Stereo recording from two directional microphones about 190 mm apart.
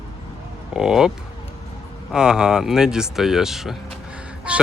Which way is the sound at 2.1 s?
5° right (ahead or behind).